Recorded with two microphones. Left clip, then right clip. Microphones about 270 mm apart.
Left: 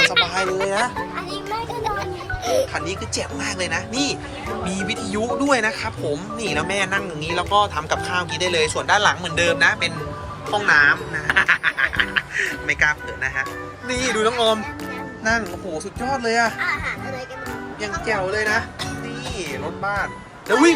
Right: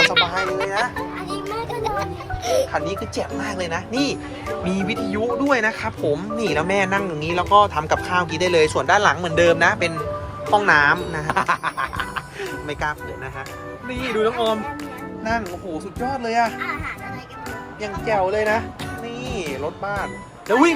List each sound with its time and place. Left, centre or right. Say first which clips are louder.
0.0 s a child's voice: even; centre
12.4 s speech: left 7 dB; right
14.2 s a child's voice: even; centre
18.1 s speech: right 2 dB; centre